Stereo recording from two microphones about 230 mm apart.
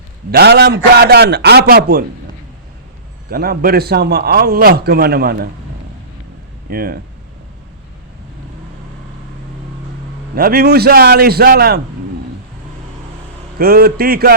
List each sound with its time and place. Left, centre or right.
0.3 s a man's voice: right
3.2 s a man's voice: right
6.7 s a man's voice: right
10.3 s a man's voice: right
13.6 s a man's voice: right